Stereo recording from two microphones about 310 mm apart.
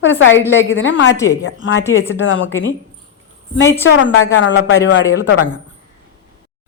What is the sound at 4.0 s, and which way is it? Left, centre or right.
Speech, left.